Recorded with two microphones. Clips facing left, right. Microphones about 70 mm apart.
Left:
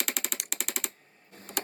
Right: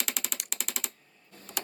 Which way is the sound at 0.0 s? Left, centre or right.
Left.